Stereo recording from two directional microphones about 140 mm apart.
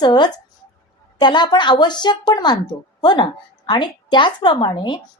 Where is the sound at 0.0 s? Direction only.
30° left (ahead or behind).